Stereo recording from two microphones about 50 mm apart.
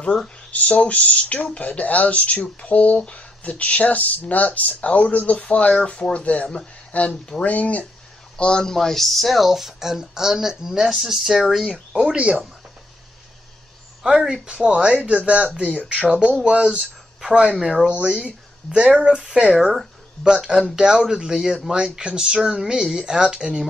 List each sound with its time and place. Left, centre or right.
0.5 s speech: left
7.4 s speech: left
8.4 s speech: centre
12.2 s speech: right
14.0 s speech: centre